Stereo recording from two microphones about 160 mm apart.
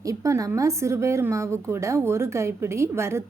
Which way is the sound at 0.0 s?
20° right (ahead or behind).